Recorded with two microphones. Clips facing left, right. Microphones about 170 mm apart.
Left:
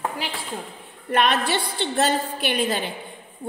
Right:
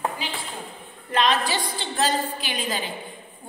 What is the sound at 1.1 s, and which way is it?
A woman's voice, 65° left (ahead or behind).